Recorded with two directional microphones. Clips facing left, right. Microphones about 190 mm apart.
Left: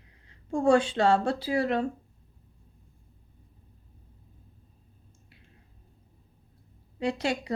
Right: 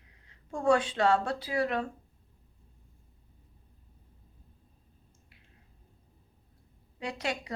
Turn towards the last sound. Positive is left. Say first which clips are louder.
# left 6 dB
turn(degrees=30)  # may be behind; listen again after turning